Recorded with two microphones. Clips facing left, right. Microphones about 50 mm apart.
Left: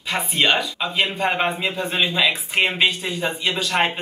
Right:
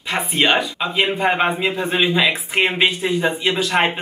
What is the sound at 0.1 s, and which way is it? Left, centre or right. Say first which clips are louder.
Speech: right 2 dB; centre.